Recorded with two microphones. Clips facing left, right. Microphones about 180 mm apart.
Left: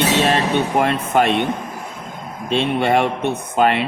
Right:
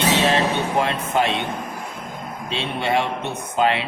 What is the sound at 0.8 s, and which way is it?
Speech, 55° left (ahead or behind).